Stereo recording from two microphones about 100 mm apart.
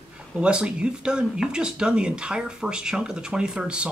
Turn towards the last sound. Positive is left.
turn(degrees=-10)  # may be behind; listen again after turning